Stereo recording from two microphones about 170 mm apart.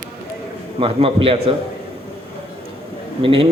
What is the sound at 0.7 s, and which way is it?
Speech, 35° right (ahead or behind).